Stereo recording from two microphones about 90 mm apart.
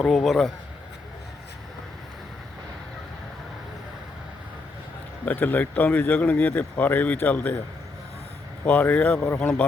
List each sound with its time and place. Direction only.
0.0 s a man's voice: 5° left (ahead or behind)
5.2 s speech: 20° left (ahead or behind)
8.6 s speech: 15° left (ahead or behind)